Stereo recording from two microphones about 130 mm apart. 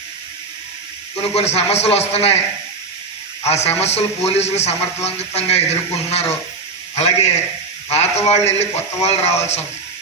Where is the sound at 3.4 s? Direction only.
55° left (ahead or behind).